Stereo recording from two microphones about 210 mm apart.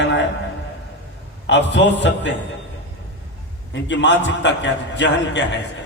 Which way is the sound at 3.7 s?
60° left (ahead or behind).